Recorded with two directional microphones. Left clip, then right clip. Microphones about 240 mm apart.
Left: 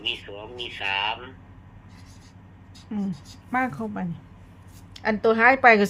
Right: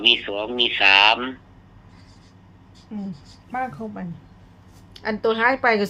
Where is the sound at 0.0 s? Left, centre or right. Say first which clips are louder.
Right 12 dB; right.